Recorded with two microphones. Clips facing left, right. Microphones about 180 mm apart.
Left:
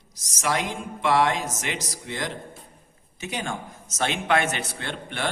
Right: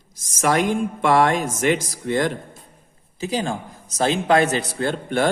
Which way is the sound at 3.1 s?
35° right (ahead or behind).